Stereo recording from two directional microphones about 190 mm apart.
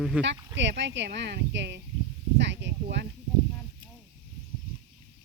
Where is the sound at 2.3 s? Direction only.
65° right (ahead or behind).